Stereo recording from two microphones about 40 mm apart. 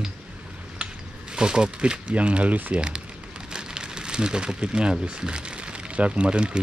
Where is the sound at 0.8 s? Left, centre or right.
Right.